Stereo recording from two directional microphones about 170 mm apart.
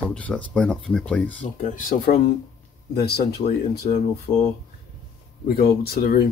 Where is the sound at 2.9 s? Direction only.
70° left (ahead or behind).